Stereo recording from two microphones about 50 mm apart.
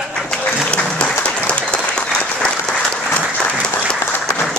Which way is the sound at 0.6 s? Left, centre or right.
Left.